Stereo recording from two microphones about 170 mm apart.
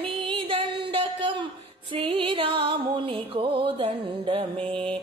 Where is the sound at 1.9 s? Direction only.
30° right (ahead or behind).